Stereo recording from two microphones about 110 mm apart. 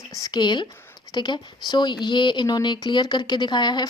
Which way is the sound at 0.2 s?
40° left (ahead or behind).